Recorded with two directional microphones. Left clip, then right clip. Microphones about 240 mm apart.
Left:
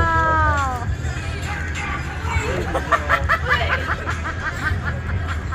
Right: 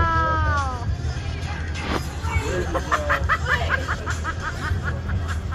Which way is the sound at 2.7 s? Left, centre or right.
Left.